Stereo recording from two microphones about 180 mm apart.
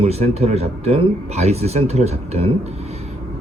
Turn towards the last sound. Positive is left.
turn(degrees=-35)  # may be behind; listen again after turning